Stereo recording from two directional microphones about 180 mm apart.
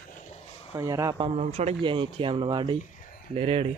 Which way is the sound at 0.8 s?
20° right (ahead or behind).